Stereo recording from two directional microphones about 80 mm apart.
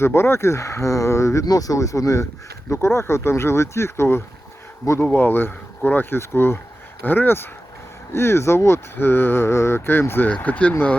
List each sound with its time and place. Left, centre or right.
0.0 s speech: left